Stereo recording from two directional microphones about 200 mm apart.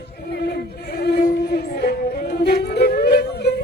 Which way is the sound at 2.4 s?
50° left (ahead or behind).